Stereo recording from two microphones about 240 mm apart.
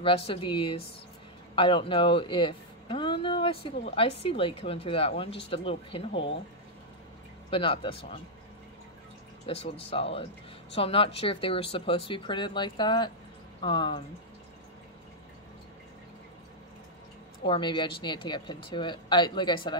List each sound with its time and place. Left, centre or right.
0.0 s speech: left
7.5 s speech: left
9.5 s speech: left
17.5 s speech: centre